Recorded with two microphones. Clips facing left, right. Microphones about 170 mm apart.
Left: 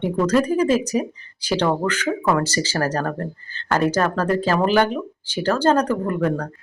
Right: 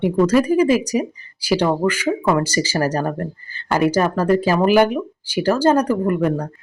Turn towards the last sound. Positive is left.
turn(degrees=-10)  # may be behind; listen again after turning